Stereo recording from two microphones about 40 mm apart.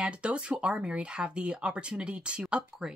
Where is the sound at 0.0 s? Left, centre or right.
Right.